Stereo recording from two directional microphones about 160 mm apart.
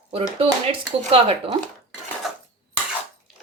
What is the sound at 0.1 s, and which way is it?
Speech, 35° right (ahead or behind).